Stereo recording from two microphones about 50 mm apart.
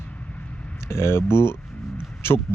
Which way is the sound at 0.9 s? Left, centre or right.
Left.